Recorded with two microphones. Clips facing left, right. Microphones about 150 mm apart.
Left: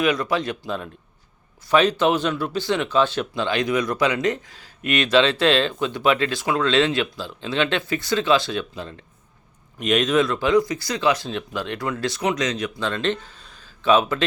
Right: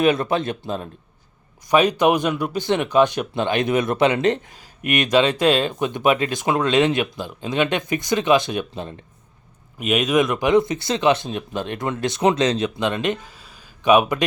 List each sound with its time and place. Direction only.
0.0 s speech: 25° right (ahead or behind)
1.6 s speech: 15° right (ahead or behind)
4.6 s speech: 15° right (ahead or behind)
9.7 s speech: 10° right (ahead or behind)